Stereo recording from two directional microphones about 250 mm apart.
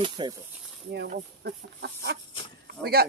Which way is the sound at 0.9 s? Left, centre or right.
Right.